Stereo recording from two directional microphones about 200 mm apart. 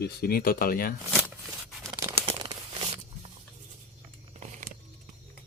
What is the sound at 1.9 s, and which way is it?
Tearing, 15° right (ahead or behind).